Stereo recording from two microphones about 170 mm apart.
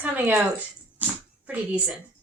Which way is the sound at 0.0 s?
10° right (ahead or behind).